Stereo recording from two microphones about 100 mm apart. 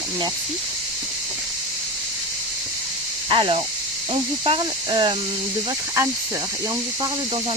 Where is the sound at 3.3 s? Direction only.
55° right (ahead or behind).